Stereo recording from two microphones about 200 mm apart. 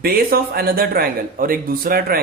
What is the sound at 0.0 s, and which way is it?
A man's voice, 50° right (ahead or behind).